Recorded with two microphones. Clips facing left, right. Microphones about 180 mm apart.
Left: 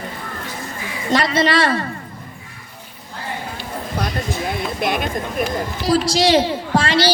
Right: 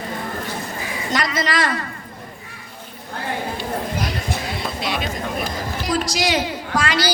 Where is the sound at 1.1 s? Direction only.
30° left (ahead or behind).